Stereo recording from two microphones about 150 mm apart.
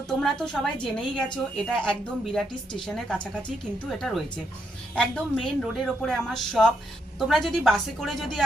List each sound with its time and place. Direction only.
0.2 s speech: 5° left (ahead or behind)